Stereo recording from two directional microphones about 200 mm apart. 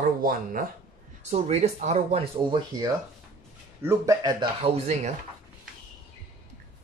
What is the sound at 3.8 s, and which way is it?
Speech, 15° right (ahead or behind).